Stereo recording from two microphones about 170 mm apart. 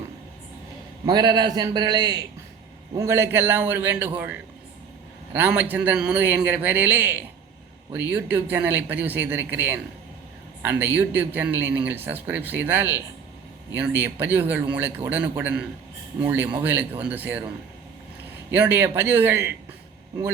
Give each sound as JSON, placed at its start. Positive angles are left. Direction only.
{"t": 1.0, "sound": "a man's voice", "side_deg": -25}
{"t": 18.5, "sound": "speech", "side_deg": -10}